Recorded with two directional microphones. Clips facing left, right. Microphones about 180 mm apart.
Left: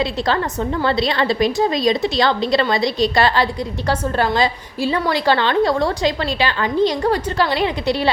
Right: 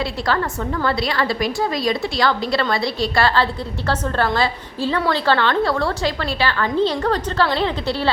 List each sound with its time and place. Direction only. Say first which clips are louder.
0.0 s a woman's voice: left 2 dB; 25° left (ahead or behind)